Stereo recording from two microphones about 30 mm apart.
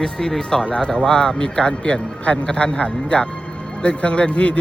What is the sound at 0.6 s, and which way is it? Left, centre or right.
Speech, left.